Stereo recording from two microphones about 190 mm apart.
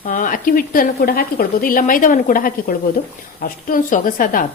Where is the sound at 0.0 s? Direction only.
45° left (ahead or behind).